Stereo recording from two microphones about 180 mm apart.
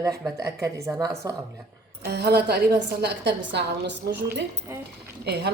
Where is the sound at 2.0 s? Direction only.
65° right (ahead or behind).